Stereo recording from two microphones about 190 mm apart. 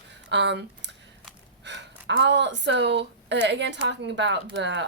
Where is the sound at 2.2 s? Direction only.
70° right (ahead or behind).